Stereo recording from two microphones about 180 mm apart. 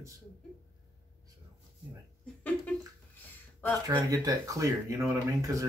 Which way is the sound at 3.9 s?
25° right (ahead or behind).